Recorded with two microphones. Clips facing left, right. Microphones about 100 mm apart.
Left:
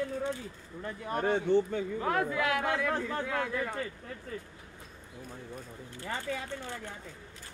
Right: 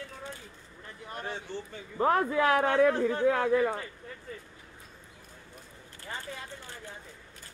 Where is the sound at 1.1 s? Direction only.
55° left (ahead or behind).